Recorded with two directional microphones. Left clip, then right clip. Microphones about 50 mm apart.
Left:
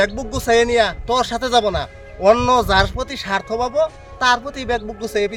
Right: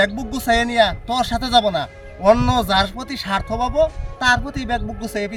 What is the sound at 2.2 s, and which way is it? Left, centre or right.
Speech, left.